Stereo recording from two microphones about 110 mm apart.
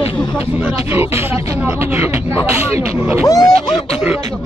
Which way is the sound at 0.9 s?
25° right (ahead or behind).